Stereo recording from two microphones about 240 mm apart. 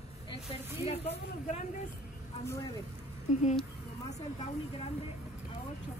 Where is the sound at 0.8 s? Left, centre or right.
Left.